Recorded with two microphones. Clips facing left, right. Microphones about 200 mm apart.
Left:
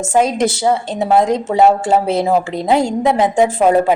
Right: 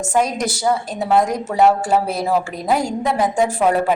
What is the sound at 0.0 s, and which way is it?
A woman's voice, 25° left (ahead or behind).